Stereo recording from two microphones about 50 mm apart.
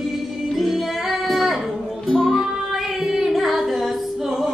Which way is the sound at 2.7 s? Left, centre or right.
Centre.